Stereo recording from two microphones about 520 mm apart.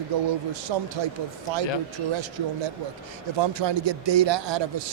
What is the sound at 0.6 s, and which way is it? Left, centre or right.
Speech, right.